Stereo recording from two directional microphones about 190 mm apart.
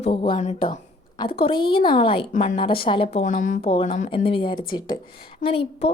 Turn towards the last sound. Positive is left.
turn(degrees=30)  # may be behind; listen again after turning